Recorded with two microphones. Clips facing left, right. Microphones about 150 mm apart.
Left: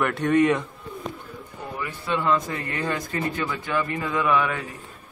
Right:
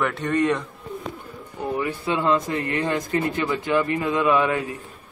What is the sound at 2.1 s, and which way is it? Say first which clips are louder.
A man's voice: right 1 dB; 25° right (ahead or behind).